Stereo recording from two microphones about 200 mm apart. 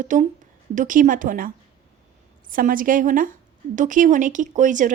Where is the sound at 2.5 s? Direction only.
45° right (ahead or behind).